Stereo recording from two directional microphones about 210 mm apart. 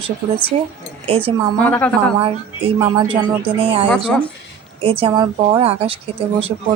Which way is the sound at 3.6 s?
25° right (ahead or behind).